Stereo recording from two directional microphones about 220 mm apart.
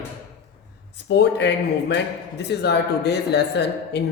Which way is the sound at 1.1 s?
50° left (ahead or behind).